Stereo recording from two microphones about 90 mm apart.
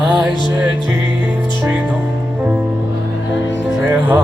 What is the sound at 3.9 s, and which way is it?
Speech, 20° right (ahead or behind).